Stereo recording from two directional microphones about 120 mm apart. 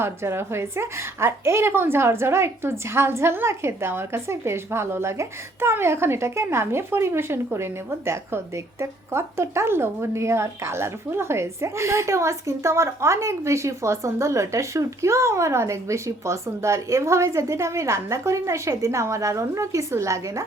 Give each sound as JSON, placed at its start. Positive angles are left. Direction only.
{"t": 0.0, "sound": "a woman's voice", "side_deg": -20}